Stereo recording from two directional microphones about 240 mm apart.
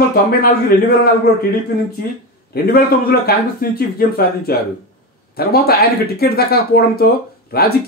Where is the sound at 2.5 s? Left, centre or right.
Left.